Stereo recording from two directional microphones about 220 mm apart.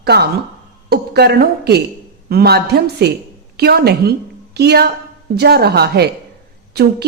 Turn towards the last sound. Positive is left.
turn(degrees=-45)  # may be behind; listen again after turning